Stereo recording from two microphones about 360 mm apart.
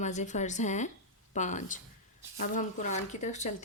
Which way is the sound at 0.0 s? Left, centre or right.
Centre.